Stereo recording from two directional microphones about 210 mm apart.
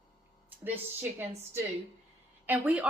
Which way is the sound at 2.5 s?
5° right (ahead or behind).